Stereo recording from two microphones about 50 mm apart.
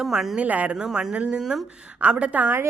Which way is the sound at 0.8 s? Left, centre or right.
Centre.